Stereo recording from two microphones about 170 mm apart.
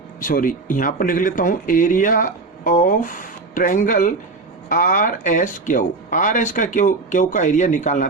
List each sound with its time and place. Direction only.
0.2 s speech: 55° left (ahead or behind)